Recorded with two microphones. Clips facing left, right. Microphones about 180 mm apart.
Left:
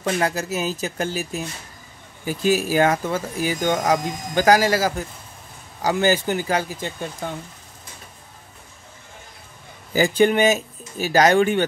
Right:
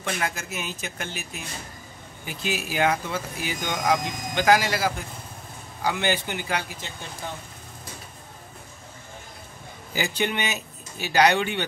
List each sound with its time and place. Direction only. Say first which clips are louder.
0.0 s speech: left 7 dB; 40° left (ahead or behind)
9.9 s speech: left 10 dB; 45° left (ahead or behind)